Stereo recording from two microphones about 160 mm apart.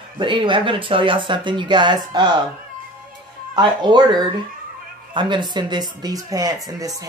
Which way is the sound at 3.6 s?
30° right (ahead or behind).